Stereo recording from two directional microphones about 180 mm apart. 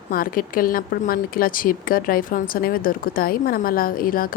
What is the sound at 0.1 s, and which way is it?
Speech, 50° left (ahead or behind).